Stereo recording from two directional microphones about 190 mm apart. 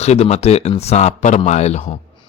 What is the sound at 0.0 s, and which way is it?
A man's voice, 35° left (ahead or behind).